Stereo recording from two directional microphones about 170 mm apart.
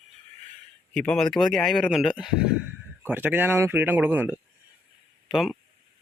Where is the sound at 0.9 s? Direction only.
5° left (ahead or behind).